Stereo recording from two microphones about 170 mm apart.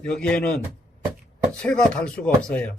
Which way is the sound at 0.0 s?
5° left (ahead or behind).